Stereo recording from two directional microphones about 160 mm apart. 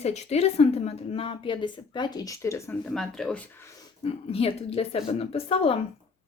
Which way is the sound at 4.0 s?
40° left (ahead or behind).